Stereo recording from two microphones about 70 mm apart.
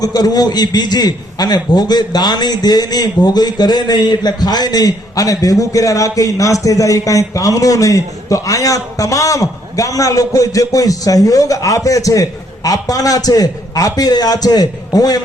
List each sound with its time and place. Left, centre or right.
0.0 s a man's voice: left